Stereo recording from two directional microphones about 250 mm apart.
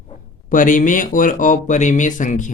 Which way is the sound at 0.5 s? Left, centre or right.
Left.